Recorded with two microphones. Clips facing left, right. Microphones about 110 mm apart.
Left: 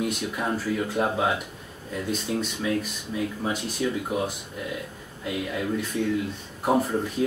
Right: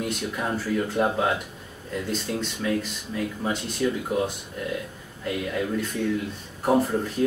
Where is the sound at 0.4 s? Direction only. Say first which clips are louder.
Right 1 dB; 5° left (ahead or behind).